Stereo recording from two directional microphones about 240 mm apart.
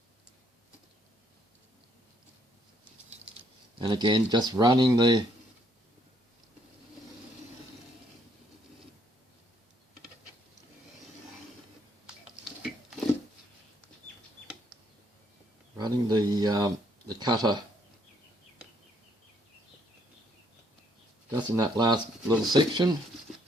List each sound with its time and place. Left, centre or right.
3.8 s speech: centre
15.8 s a sound: centre
21.3 s speech: centre